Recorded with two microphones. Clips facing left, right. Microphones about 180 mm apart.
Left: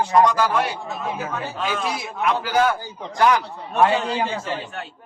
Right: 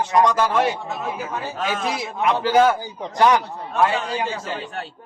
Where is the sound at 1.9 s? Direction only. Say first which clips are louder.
Right 3 dB; 20° right (ahead or behind).